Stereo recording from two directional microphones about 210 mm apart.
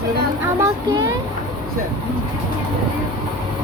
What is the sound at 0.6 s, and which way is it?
Speech, 20° right (ahead or behind).